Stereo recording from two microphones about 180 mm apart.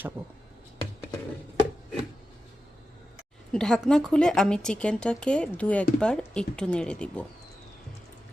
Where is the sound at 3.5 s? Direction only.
5° left (ahead or behind).